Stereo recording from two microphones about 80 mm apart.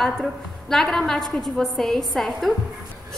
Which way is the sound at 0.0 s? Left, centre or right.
Centre.